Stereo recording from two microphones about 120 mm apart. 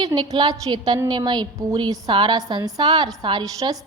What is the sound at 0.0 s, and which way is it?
A woman's voice, 35° right (ahead or behind).